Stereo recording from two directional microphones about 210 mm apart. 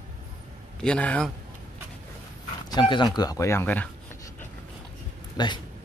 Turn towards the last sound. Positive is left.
turn(degrees=20)  # may be behind; listen again after turning